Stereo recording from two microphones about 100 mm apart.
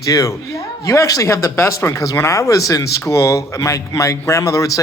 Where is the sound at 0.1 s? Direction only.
35° left (ahead or behind).